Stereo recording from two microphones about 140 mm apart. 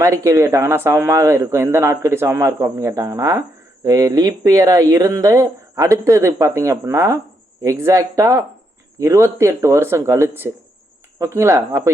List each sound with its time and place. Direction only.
0.0 s a man's voice: 20° right (ahead or behind)